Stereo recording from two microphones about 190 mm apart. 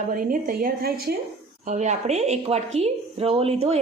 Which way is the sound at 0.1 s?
45° right (ahead or behind).